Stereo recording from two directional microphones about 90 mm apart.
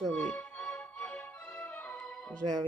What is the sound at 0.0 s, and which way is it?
Music, 10° left (ahead or behind).